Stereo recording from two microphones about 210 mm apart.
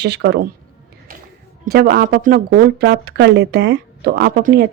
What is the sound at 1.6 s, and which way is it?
Speech, 45° right (ahead or behind).